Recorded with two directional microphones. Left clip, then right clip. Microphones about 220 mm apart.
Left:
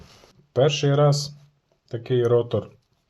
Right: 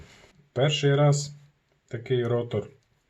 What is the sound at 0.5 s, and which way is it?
Speech, 35° left (ahead or behind).